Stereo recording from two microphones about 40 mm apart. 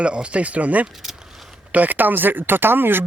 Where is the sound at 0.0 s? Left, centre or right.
Right.